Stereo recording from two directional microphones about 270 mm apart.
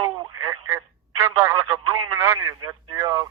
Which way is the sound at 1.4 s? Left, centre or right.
Centre.